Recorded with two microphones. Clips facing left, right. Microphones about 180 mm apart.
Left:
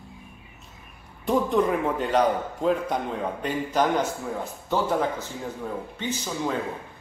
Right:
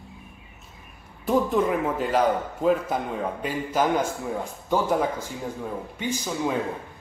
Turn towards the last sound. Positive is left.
turn(degrees=-10)  # may be behind; listen again after turning